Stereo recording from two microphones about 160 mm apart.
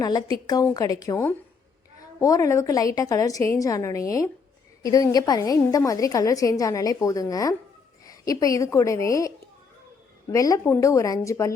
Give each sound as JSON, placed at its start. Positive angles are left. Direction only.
{"t": 0.0, "sound": "a woman's voice", "side_deg": 25}
{"t": 10.3, "sound": "a woman's voice", "side_deg": 20}